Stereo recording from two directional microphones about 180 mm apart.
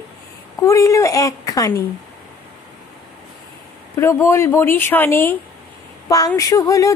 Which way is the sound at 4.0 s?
15° left (ahead or behind).